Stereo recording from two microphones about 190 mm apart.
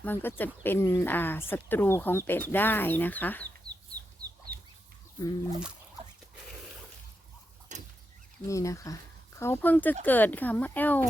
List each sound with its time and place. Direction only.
0.0 s speech: 10° left (ahead or behind)
7.7 s a sound: 40° right (ahead or behind)
8.4 s speech: 15° left (ahead or behind)